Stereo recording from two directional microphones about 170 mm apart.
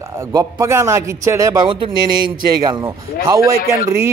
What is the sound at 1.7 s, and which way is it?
Speech, 30° right (ahead or behind).